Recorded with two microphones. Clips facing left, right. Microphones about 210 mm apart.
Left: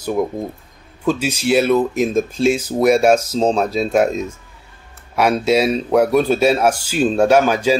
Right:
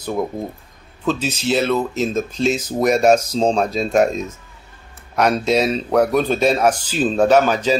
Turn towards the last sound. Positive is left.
turn(degrees=10)  # may be behind; listen again after turning